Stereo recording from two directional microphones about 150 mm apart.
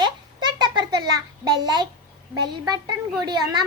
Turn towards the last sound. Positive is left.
turn(degrees=-25)  # may be behind; listen again after turning